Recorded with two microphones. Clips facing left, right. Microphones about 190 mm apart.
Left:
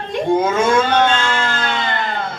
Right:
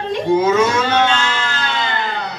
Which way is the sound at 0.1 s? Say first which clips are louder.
Right 2 dB; 50° left (ahead or behind).